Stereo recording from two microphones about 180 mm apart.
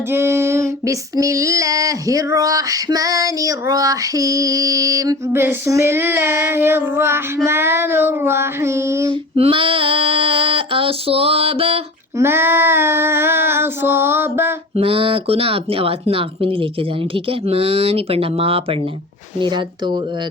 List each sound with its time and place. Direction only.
0.1 s female singing: 15° right (ahead or behind)
9.3 s female singing: 30° right (ahead or behind)
12.1 s female singing: 15° right (ahead or behind)
14.8 s speech: 30° right (ahead or behind)
19.4 s female singing: 25° right (ahead or behind)